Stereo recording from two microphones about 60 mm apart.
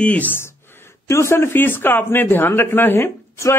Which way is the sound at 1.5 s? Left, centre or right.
Left.